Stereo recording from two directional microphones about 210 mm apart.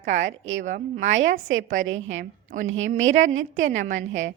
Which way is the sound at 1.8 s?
65° right (ahead or behind).